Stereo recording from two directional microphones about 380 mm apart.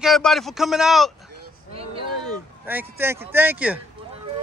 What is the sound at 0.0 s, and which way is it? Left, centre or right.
Speech, centre.